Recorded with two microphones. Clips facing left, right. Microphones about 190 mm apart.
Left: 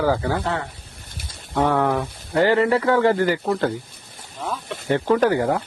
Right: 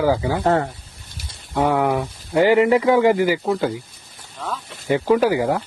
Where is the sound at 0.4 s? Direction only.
40° right (ahead or behind).